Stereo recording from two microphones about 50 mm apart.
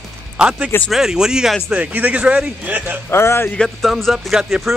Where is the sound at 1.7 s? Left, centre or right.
Right.